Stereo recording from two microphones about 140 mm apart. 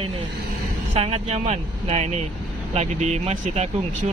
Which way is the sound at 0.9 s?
45° right (ahead or behind).